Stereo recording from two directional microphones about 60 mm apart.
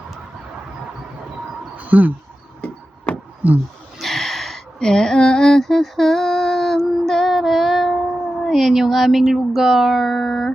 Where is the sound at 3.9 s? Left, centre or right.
Centre.